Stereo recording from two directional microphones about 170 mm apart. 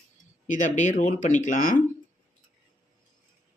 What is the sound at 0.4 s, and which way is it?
Speech, 50° left (ahead or behind).